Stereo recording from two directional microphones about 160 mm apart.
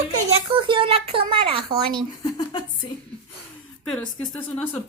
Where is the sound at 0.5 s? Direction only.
35° right (ahead or behind).